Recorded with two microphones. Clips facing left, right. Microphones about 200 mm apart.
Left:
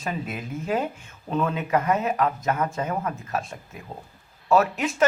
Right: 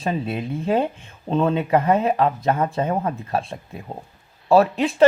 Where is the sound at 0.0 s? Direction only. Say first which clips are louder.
Right 6 dB; 30° right (ahead or behind).